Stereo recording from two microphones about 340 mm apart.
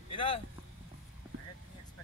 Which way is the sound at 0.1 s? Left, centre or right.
Centre.